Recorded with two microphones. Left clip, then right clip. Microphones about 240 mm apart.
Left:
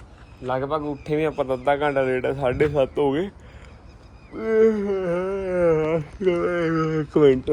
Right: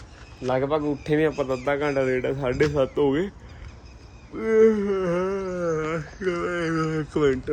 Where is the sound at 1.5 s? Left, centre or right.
Right.